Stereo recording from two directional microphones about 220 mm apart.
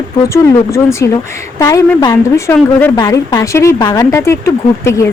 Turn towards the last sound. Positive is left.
turn(degrees=15)  # may be behind; listen again after turning